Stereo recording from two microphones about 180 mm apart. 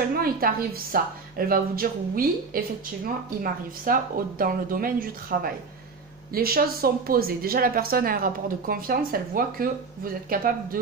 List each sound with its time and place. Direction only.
0.2 s speech: 55° right (ahead or behind)
3.8 s speech: 50° right (ahead or behind)